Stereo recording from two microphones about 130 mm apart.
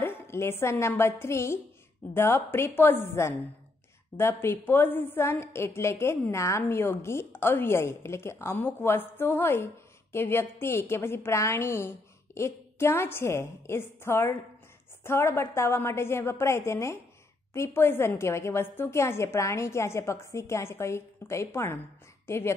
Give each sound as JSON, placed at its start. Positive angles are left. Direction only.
{"t": 0.0, "sound": "a woman's voice", "side_deg": 20}